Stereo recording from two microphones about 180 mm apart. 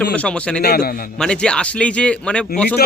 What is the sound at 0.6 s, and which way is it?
Speech, 60° left (ahead or behind).